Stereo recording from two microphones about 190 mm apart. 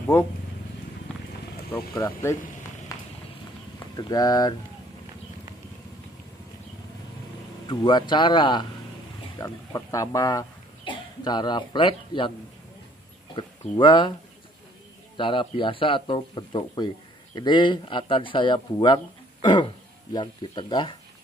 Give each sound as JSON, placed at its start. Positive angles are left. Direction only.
{"t": 1.7, "sound": "speech", "side_deg": 15}
{"t": 2.9, "sound": "rain on surface", "side_deg": 20}
{"t": 3.9, "sound": "speech", "side_deg": 20}
{"t": 7.6, "sound": "speech", "side_deg": 25}
{"t": 13.3, "sound": "speech", "side_deg": 25}
{"t": 15.1, "sound": "speech", "side_deg": 25}